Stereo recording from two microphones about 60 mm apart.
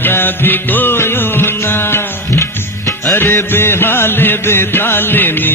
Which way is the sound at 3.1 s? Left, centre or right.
Left.